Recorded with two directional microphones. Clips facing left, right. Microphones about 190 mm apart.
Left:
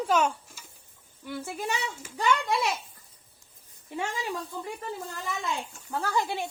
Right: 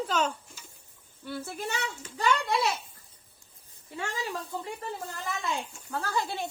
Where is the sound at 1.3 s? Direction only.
10° left (ahead or behind).